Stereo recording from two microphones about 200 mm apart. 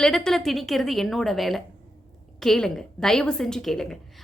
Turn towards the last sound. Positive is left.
turn(degrees=0)  # may be behind; listen again after turning